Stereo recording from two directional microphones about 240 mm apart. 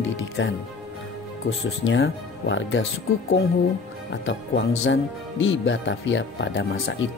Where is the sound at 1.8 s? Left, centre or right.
Left.